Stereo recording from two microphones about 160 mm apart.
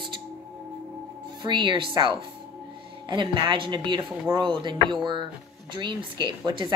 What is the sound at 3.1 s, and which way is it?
A woman's voice, 30° right (ahead or behind).